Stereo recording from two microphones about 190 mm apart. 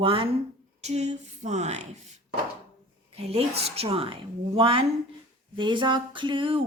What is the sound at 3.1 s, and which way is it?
Speech, 30° right (ahead or behind).